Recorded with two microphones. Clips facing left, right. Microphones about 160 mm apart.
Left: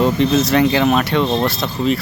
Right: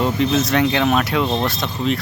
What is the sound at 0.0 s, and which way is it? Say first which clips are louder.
Speech: left 3 dB; centre (ahead or behind).